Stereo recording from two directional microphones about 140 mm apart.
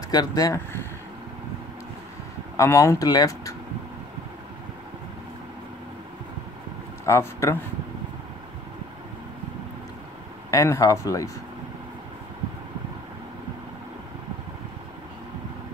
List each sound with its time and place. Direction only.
0.1 s speech: 25° left (ahead or behind)
2.5 s speech: 25° left (ahead or behind)
7.1 s speech: 20° left (ahead or behind)
10.5 s speech: 20° left (ahead or behind)